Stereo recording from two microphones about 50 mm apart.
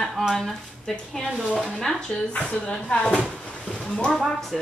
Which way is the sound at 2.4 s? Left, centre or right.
Left.